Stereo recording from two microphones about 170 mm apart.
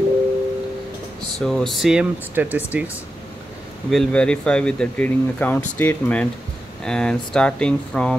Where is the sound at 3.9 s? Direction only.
5° left (ahead or behind).